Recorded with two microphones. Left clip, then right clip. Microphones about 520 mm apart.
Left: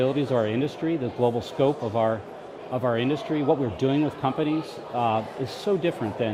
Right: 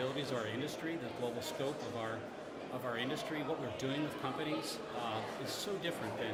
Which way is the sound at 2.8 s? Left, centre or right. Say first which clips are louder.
Left 14 dB; left.